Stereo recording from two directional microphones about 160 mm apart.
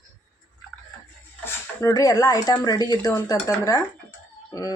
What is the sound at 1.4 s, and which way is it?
Speech, 15° left (ahead or behind).